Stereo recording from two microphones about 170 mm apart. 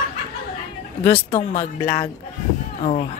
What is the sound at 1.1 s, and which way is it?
Speech, 40° left (ahead or behind).